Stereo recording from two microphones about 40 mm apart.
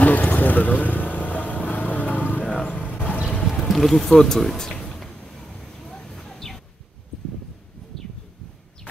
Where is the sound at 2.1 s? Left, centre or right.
Left.